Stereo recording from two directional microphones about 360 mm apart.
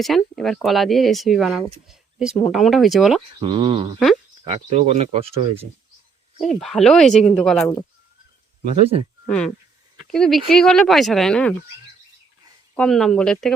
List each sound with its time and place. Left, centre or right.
0.0 s speech: centre
3.4 s speech: centre
6.4 s speech: centre
9.2 s speech: centre
12.7 s speech: centre